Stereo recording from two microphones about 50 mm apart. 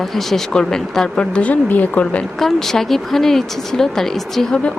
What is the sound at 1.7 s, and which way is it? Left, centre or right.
Speech, left.